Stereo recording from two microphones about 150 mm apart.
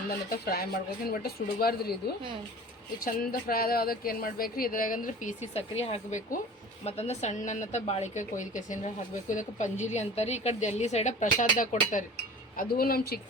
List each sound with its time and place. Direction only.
0.3 s speech: 90° left
3.0 s a woman's voice: 80° left; by 12.0 s 55° left (ahead or behind)
12.5 s speech: 85° left